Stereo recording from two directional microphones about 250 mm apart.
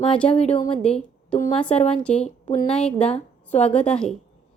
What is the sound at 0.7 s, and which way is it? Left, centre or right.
A woman's voice, centre.